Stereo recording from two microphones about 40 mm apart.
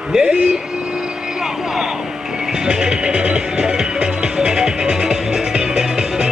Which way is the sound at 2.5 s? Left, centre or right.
Centre.